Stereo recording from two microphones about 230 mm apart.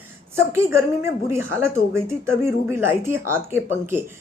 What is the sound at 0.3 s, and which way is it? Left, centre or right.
Speech, centre.